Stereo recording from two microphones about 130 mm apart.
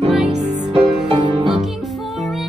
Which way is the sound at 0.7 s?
45° right (ahead or behind).